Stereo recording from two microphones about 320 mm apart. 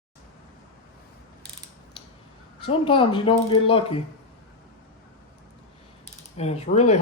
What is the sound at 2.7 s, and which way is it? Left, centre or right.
Speech, centre.